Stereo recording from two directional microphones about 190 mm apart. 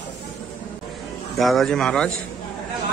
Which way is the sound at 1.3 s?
Centre (ahead or behind).